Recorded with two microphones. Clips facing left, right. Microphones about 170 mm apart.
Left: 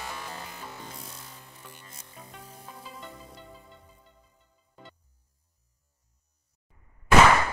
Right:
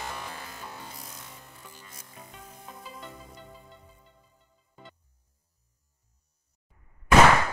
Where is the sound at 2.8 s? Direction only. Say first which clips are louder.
Right 1 dB; centre (ahead or behind).